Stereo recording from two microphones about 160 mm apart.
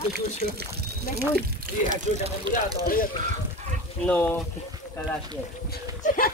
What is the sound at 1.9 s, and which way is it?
Speech, 50° right (ahead or behind).